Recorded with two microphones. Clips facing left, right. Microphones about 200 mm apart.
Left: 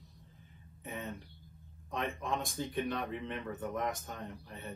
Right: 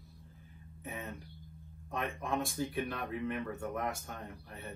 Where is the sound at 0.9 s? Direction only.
Centre (ahead or behind).